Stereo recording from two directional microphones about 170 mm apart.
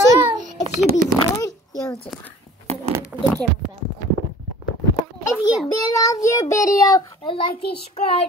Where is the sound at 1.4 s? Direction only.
20° left (ahead or behind).